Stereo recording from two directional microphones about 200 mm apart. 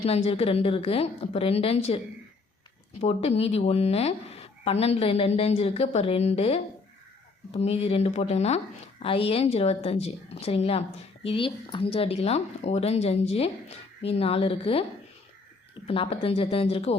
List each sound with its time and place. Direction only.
0.0 s a woman's voice: 30° left (ahead or behind)
3.0 s a woman's voice: 30° left (ahead or behind)
15.9 s a woman's voice: 30° left (ahead or behind)